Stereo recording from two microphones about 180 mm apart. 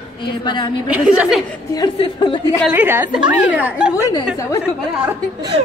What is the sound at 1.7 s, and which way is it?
Speech, 25° left (ahead or behind).